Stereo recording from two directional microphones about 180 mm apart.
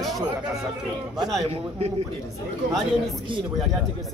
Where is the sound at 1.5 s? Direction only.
35° right (ahead or behind).